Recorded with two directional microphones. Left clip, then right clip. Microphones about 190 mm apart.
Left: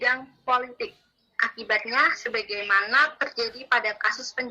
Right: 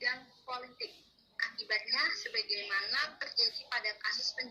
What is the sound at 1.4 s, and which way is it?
A woman's voice, 35° left (ahead or behind).